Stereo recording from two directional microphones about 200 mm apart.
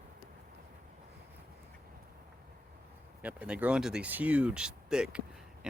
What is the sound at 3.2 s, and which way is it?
Speech, 5° right (ahead or behind).